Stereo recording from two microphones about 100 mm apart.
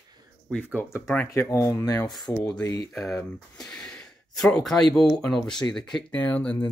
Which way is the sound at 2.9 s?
5° left (ahead or behind).